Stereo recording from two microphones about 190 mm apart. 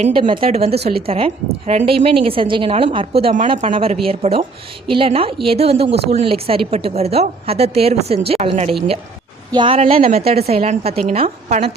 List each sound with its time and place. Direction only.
0.0 s a woman's voice: 25° right (ahead or behind)